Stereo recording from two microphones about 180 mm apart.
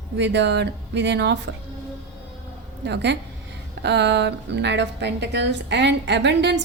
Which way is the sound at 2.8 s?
70° right (ahead or behind).